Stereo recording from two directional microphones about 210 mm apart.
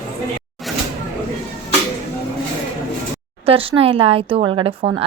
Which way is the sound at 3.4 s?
25° right (ahead or behind).